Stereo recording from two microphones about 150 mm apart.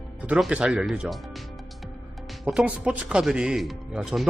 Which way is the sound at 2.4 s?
10° right (ahead or behind).